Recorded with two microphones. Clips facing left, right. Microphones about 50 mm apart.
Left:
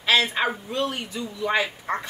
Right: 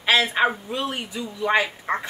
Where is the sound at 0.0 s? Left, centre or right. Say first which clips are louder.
Right 2 dB; centre.